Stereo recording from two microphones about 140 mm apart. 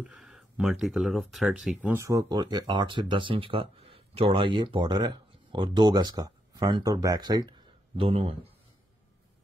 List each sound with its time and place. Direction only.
0.0 s speech: 5° right (ahead or behind); by 7.5 s 30° right (ahead or behind)
8.0 s speech: 40° right (ahead or behind)